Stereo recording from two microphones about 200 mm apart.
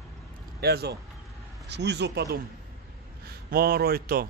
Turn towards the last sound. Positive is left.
turn(degrees=-50)  # may be behind; listen again after turning